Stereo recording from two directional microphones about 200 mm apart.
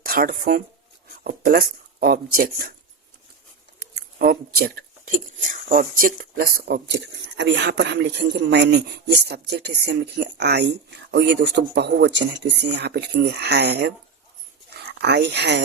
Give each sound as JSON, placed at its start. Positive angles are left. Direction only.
{"t": 0.0, "sound": "speech", "side_deg": -50}
{"t": 3.8, "sound": "a sound", "side_deg": -50}
{"t": 5.4, "sound": "speech", "side_deg": -45}